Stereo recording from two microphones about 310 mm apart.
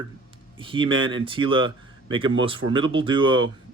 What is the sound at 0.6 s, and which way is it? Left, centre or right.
Speech, centre.